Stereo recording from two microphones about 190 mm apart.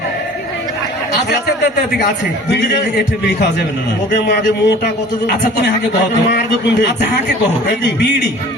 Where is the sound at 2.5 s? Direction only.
60° left (ahead or behind).